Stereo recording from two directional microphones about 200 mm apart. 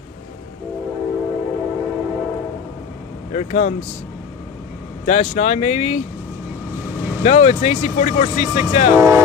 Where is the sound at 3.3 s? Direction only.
35° left (ahead or behind).